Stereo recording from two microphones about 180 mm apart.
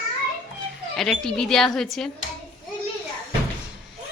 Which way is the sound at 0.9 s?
5° left (ahead or behind).